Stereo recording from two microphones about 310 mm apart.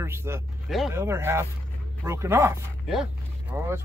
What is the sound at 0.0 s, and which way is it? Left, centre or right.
Speech, centre.